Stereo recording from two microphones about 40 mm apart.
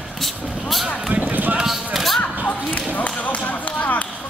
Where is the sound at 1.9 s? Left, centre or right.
Centre.